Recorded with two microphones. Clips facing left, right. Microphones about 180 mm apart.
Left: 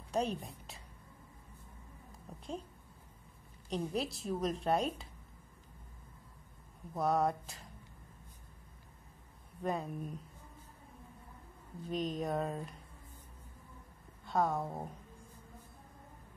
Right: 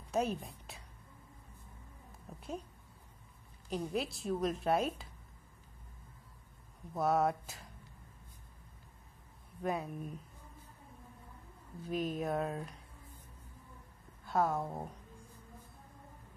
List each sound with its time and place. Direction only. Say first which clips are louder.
0.1 s a woman's voice: right 1 dB; 5° right (ahead or behind)
2.3 s a sound: even; centre (ahead or behind)
3.7 s a woman's voice: even; centre (ahead or behind)
6.9 s a woman's voice: right 1 dB; centre (ahead or behind)
9.6 s a woman's voice: even; centre (ahead or behind)
11.9 s a woman's voice: even; 5° right (ahead or behind)
14.2 s a woman's voice: even; centre (ahead or behind)